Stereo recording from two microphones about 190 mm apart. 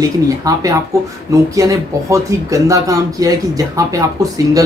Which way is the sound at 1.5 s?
15° right (ahead or behind).